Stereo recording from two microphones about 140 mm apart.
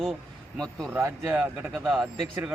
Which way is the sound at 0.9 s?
15° right (ahead or behind).